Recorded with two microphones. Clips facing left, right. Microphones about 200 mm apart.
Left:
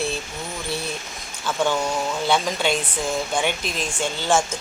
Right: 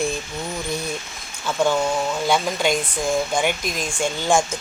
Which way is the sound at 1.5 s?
10° right (ahead or behind).